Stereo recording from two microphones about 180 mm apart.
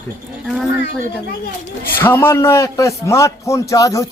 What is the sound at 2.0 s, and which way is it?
A man's voice, 10° left (ahead or behind).